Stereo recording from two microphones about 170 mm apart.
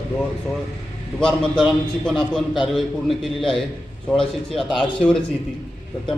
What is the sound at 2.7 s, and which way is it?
Speech, centre (ahead or behind).